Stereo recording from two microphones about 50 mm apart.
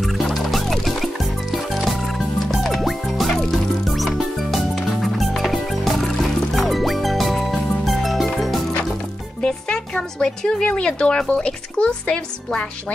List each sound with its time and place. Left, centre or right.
0.0 s music: centre
10.1 s speech: centre
10.6 s speech: left